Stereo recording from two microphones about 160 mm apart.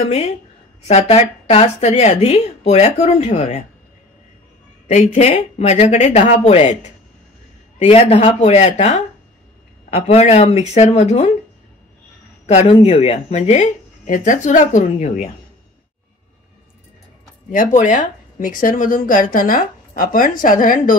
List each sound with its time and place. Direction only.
0.0 s a woman's voice: 40° left (ahead or behind)
4.8 s a woman's voice: 40° left (ahead or behind)
12.6 s a woman's voice: 30° left (ahead or behind)
12.9 s speech: 40° left (ahead or behind)
17.5 s speech: 55° left (ahead or behind)